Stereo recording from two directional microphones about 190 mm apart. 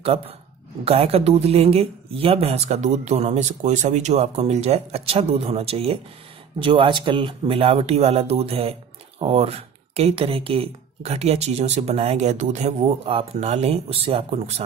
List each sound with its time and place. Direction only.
0.8 s speech: 30° right (ahead or behind)